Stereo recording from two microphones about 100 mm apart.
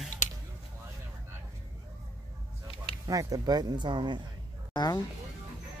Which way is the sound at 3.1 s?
35° right (ahead or behind).